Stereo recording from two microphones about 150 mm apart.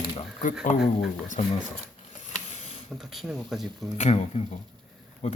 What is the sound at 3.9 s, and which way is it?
Speech, 45° left (ahead or behind).